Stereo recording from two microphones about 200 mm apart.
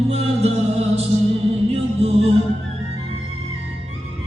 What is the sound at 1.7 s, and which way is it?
Music, 30° right (ahead or behind).